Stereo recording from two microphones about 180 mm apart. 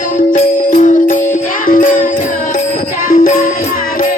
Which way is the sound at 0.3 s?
45° left (ahead or behind).